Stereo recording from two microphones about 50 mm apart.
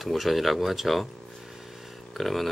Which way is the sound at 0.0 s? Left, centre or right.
Centre.